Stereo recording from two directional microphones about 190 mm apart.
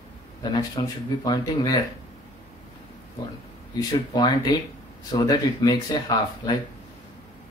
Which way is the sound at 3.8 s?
20° left (ahead or behind).